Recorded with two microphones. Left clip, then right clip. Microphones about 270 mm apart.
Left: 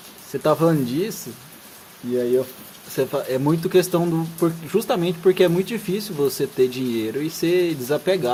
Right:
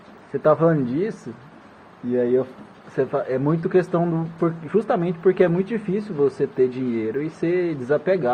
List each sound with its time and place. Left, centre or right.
0.4 s speech: left
2.1 s speech: left